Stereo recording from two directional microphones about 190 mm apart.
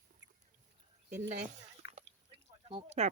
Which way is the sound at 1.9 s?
35° right (ahead or behind).